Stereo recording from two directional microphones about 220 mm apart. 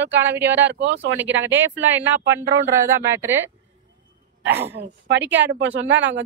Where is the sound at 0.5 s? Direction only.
55° right (ahead or behind).